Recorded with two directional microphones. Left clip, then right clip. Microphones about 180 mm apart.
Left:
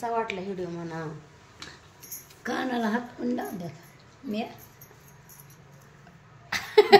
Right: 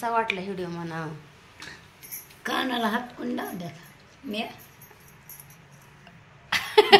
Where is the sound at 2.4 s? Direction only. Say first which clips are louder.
Right 3 dB; 10° left (ahead or behind).